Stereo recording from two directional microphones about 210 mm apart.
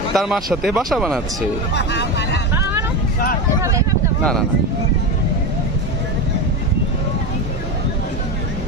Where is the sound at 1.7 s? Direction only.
55° left (ahead or behind).